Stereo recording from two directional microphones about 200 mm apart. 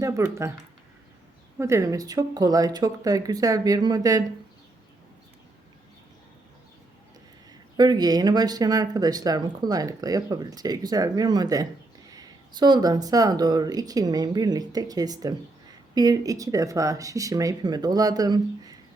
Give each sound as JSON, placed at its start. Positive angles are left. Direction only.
{"t": 0.0, "sound": "speech", "side_deg": -15}
{"t": 1.5, "sound": "speech", "side_deg": -15}
{"t": 7.8, "sound": "speech", "side_deg": -20}